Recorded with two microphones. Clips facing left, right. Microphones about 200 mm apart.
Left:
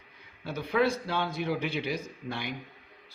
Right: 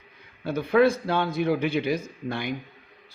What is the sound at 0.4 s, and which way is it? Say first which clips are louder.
A man's voice: right 7 dB; 50° right (ahead or behind).